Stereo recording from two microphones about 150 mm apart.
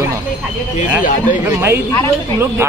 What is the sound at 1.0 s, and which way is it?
Speech, 60° left (ahead or behind).